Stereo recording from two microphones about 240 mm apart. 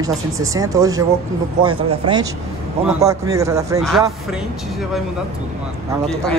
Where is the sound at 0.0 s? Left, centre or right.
Centre.